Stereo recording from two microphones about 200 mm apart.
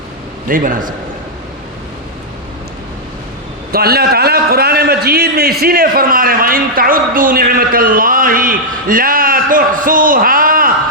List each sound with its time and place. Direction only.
0.4 s a man's voice: 45° right (ahead or behind)
3.7 s a man's voice: 50° right (ahead or behind)